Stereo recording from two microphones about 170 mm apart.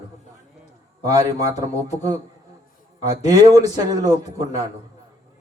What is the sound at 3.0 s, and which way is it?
A man's voice, 20° right (ahead or behind).